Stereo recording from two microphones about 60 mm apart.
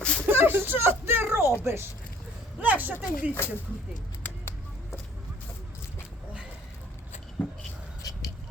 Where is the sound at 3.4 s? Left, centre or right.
Left.